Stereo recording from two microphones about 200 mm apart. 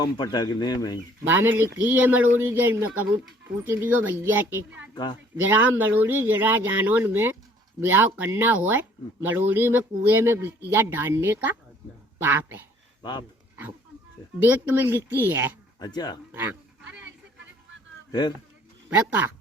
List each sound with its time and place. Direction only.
0.0 s speech: 20° left (ahead or behind)
1.3 s speech: 10° right (ahead or behind)
13.0 s speech: 20° left (ahead or behind)
14.3 s speech: 10° right (ahead or behind)
15.8 s speech: 20° left (ahead or behind)
16.3 s goat: 10° right (ahead or behind)
18.1 s speech: 20° left (ahead or behind)
18.9 s speech: 10° right (ahead or behind)